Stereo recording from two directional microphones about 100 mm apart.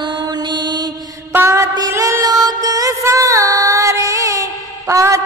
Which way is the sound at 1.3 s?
30° right (ahead or behind).